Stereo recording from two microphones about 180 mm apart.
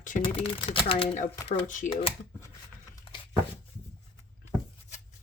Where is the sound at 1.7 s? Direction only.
45° left (ahead or behind).